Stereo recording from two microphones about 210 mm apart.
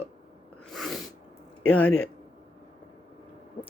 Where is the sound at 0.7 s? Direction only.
Centre (ahead or behind).